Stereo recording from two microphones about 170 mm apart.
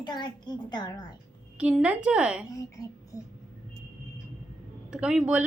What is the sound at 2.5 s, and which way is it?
Speech, 20° left (ahead or behind).